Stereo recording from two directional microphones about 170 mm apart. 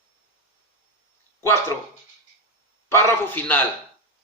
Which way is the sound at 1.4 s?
15° left (ahead or behind).